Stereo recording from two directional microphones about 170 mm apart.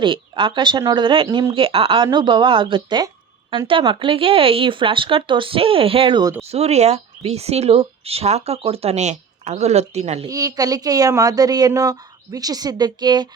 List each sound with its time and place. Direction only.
0.0 s a woman's voice: 30° right (ahead or behind)
6.4 s speech: 40° right (ahead or behind)
10.2 s a woman's voice: 20° right (ahead or behind)